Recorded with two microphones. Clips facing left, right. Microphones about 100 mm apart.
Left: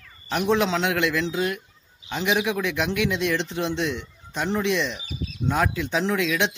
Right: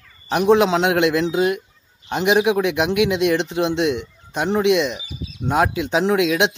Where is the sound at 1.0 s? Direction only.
25° right (ahead or behind).